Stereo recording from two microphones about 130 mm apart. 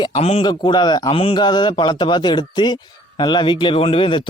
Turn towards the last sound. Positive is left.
turn(degrees=40)  # may be behind; listen again after turning